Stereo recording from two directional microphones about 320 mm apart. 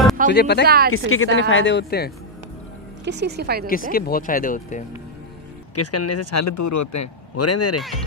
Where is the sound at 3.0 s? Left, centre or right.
Right.